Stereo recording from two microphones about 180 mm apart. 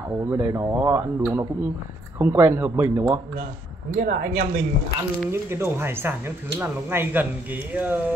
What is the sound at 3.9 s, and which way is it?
Speech, 50° right (ahead or behind).